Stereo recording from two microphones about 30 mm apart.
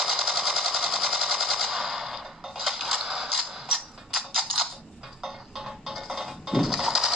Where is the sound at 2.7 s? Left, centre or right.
Centre.